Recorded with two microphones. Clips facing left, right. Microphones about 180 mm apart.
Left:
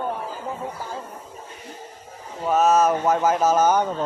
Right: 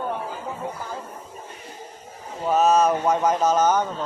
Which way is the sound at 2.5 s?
Centre (ahead or behind).